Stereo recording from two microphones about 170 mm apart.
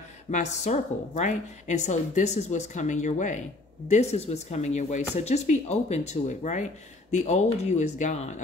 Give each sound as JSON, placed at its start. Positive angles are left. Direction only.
{"t": 0.3, "sound": "a woman's voice", "side_deg": 45}